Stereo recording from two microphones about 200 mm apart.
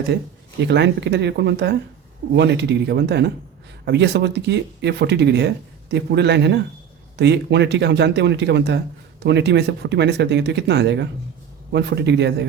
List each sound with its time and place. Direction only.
0.6 s speech: 60° right (ahead or behind)